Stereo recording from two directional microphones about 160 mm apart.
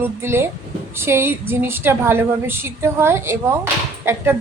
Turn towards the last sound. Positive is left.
turn(degrees=-15)  # may be behind; listen again after turning